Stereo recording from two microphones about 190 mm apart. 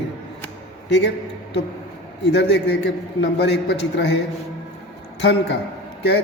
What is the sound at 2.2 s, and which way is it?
A man's voice, 65° left (ahead or behind).